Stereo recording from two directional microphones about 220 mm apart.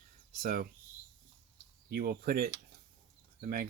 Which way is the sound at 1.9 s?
40° right (ahead or behind).